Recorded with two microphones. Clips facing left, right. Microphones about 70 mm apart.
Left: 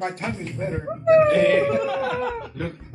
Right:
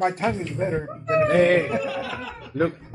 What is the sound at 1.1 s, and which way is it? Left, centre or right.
Speech, right.